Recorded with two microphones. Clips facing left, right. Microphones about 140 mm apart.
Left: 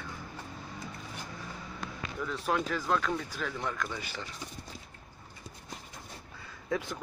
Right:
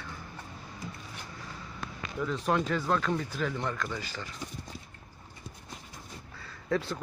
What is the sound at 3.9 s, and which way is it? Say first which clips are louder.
Speech: right 1 dB; 20° left (ahead or behind).